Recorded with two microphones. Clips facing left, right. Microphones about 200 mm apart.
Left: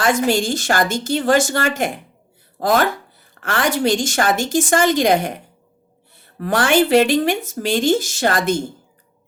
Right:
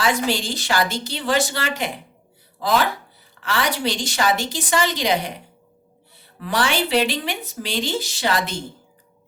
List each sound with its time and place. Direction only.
0.0 s a woman's voice: 50° left (ahead or behind)